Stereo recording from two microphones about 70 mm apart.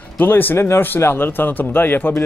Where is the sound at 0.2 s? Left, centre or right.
Left.